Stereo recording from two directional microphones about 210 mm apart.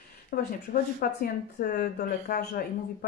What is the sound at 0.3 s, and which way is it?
Speech, 45° left (ahead or behind).